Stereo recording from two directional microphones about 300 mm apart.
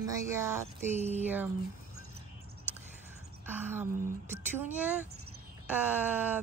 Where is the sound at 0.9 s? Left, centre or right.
Right.